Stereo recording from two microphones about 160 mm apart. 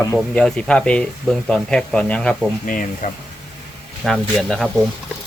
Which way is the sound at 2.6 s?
55° left (ahead or behind).